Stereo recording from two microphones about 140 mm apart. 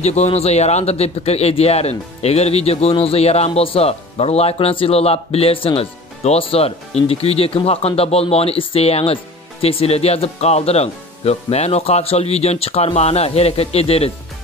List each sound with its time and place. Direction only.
0.0 s speech: 50° left (ahead or behind)